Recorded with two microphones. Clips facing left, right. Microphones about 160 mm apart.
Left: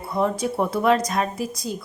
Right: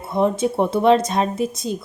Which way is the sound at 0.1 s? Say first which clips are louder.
Right 4 dB; 20° right (ahead or behind).